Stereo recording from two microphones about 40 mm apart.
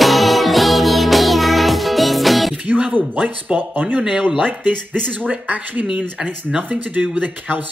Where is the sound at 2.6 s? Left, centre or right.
Right.